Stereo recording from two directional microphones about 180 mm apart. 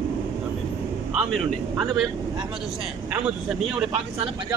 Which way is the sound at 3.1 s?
5° right (ahead or behind).